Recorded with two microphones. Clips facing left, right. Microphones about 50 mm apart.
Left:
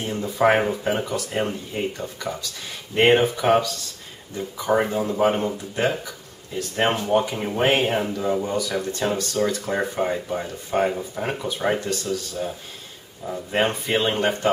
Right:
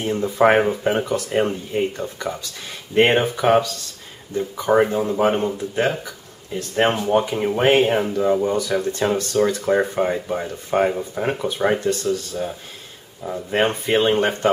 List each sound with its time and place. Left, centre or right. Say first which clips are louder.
0.0 s speech: right 3 dB; centre
11.8 s speech: right 6 dB; right
12.1 s speech: right 3 dB; centre